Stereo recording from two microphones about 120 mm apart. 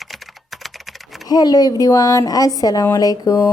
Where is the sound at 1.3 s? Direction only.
35° left (ahead or behind).